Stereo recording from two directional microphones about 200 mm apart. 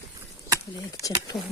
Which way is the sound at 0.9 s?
15° left (ahead or behind).